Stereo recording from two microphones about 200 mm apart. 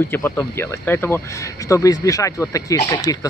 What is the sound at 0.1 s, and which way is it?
Speech, 15° left (ahead or behind).